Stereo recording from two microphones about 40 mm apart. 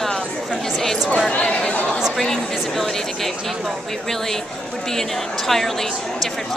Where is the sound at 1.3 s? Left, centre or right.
Left.